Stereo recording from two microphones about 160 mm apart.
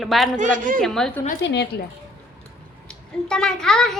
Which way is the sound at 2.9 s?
5° left (ahead or behind).